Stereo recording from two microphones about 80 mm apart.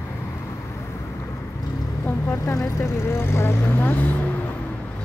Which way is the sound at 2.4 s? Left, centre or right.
Left.